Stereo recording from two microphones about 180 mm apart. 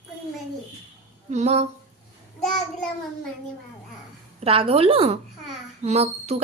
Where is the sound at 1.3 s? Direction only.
40° right (ahead or behind).